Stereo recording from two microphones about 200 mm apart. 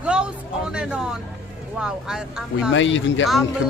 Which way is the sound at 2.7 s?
70° left (ahead or behind).